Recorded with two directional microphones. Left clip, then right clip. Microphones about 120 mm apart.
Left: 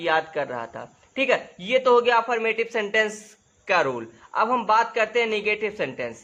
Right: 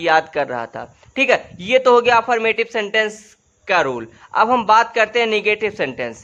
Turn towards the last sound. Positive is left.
turn(degrees=-40)  # may be behind; listen again after turning